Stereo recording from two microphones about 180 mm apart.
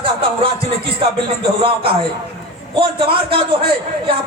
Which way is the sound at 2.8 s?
30° right (ahead or behind).